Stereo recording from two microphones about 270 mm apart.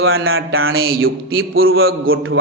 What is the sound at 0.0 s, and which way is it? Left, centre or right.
A man's voice, right.